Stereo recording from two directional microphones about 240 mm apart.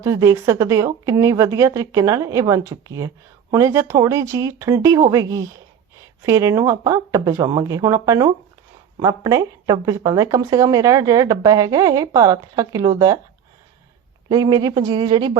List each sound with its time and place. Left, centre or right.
0.0 s speech: centre
14.3 s speech: centre